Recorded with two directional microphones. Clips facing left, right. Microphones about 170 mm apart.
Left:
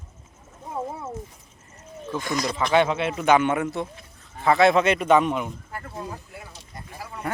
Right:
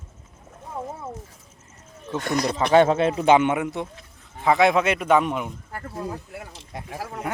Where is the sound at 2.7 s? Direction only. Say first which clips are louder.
Right 5 dB; 40° right (ahead or behind); by 5.5 s 10° right (ahead or behind).